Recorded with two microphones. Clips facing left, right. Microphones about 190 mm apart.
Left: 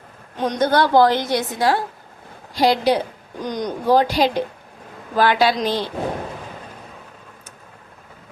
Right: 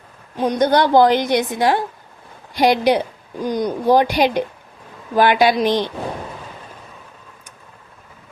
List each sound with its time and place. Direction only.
0.3 s a woman's voice: 10° right (ahead or behind)